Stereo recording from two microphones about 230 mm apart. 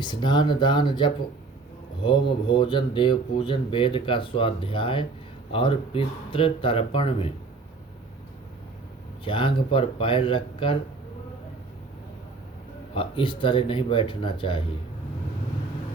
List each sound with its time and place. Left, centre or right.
0.0 s speech: centre
9.2 s speech: left
12.9 s speech: left